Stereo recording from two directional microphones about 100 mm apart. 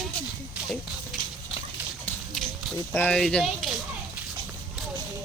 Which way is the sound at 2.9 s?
20° left (ahead or behind).